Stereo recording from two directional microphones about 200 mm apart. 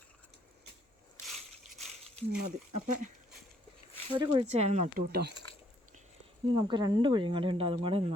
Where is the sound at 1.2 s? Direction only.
Centre (ahead or behind).